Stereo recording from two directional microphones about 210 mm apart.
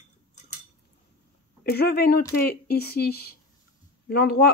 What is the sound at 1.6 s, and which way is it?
Speech, 50° left (ahead or behind).